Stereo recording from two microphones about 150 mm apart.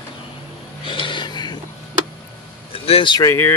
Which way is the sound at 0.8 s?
35° left (ahead or behind).